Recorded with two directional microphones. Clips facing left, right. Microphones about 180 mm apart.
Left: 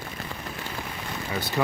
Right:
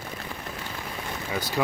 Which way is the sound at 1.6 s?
5° right (ahead or behind).